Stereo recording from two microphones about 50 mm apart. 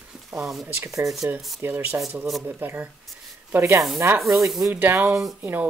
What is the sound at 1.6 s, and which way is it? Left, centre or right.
Speech, right.